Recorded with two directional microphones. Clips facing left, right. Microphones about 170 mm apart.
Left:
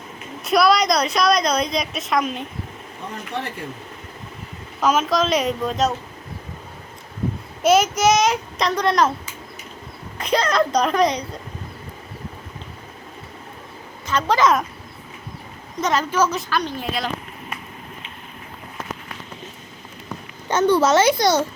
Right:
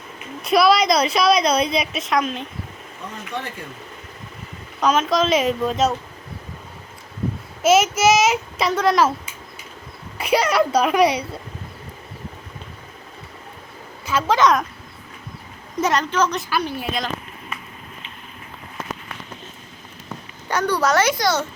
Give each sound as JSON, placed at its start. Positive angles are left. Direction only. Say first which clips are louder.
{"t": 0.4, "sound": "a woman's voice", "louder": "right 1 dB", "side_deg": 0}
{"t": 4.8, "sound": "a child's voice", "louder": "right 1 dB", "side_deg": 5}
{"t": 7.6, "sound": "a child's voice", "louder": "even", "side_deg": -5}
{"t": 10.2, "sound": "a child's voice", "louder": "right 1 dB", "side_deg": -10}
{"t": 14.1, "sound": "a child's voice", "louder": "right 1 dB", "side_deg": -5}
{"t": 15.8, "sound": "a child's voice", "louder": "even", "side_deg": 0}
{"t": 16.5, "sound": "a child's voice", "louder": "even", "side_deg": -10}
{"t": 20.5, "sound": "a child's voice", "louder": "left 4 dB", "side_deg": 25}